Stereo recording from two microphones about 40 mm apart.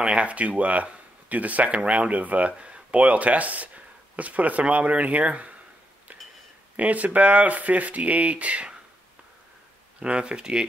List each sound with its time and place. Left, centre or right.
0.0 s speech: right
2.5 s speech: right
6.8 s speech: right
9.9 s speech: right